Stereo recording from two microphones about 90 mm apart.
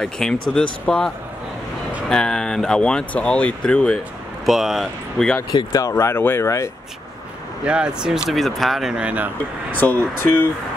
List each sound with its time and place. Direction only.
0.0 s speech: 5° left (ahead or behind)
4.5 s speech: centre (ahead or behind)
5.2 s speech: 10° left (ahead or behind)
5.7 s speech: 35° left (ahead or behind)
7.6 s speech: 10° right (ahead or behind)
9.8 s speech: 20° left (ahead or behind)